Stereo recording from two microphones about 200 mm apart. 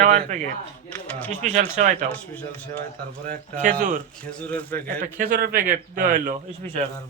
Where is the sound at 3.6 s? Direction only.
40° right (ahead or behind).